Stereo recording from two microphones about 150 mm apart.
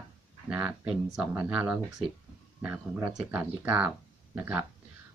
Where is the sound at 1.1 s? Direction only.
10° right (ahead or behind).